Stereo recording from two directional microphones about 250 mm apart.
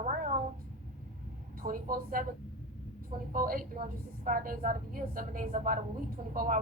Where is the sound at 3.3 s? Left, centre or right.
Right.